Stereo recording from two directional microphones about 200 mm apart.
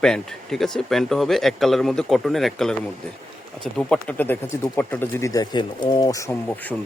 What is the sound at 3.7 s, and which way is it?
Speech, 5° left (ahead or behind).